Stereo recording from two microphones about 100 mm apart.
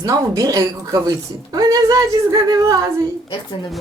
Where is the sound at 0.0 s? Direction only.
35° right (ahead or behind).